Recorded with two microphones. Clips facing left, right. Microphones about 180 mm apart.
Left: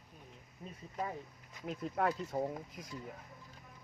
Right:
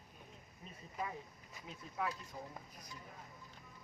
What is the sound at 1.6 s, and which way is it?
Speech, 60° left (ahead or behind).